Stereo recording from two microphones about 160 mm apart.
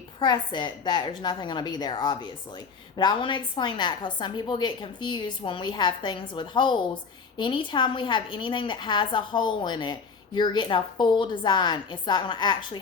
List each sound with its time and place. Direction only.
0.2 s a woman's voice: 30° left (ahead or behind)